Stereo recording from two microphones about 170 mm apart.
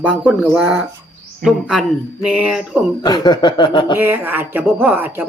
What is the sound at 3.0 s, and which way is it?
Chuckle, 25° left (ahead or behind).